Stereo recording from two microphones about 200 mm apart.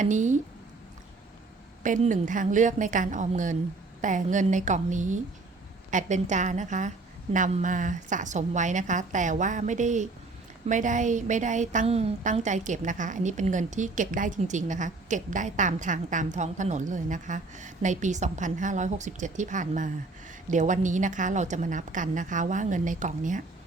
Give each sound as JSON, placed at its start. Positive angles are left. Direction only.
{"t": 0.0, "sound": "a woman's voice", "side_deg": -40}
{"t": 1.8, "sound": "a woman's voice", "side_deg": -40}